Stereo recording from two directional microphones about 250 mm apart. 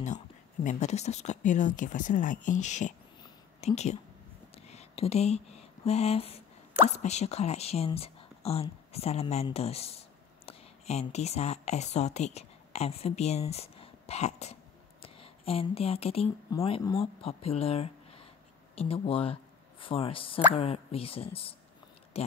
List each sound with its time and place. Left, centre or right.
0.7 s speech: left